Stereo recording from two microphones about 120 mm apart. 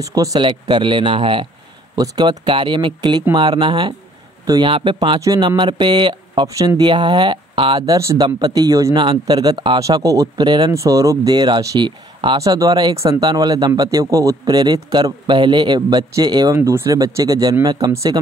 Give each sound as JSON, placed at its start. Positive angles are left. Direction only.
{"t": 0.0, "sound": "speech", "side_deg": -30}
{"t": 0.4, "sound": "speech", "side_deg": -40}
{"t": 5.2, "sound": "speech", "side_deg": -30}
{"t": 7.8, "sound": "speech", "side_deg": -25}
{"t": 12.4, "sound": "speech", "side_deg": -30}